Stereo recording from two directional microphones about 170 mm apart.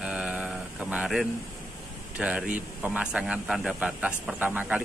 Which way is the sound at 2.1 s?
5° right (ahead or behind).